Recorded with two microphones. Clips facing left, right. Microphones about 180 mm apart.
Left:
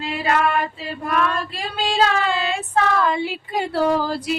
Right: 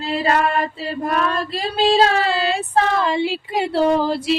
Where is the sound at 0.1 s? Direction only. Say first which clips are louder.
Right 2 dB; 35° right (ahead or behind).